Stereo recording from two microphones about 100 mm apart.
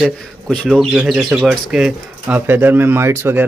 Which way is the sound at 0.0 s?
Centre (ahead or behind).